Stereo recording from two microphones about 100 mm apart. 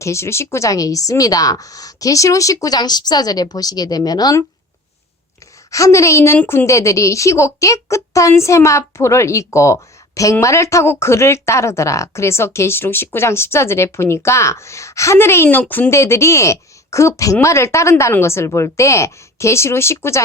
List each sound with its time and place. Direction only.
0.0 s a woman's voice: 30° left (ahead or behind)
5.7 s speech: 30° left (ahead or behind)
6.4 s a woman's voice: 15° left (ahead or behind)
6.7 s a woman's voice: 30° left (ahead or behind)
15.9 s speech: 30° left (ahead or behind)